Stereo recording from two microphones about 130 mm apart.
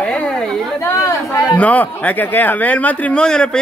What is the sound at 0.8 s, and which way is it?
Chatter, 20° left (ahead or behind).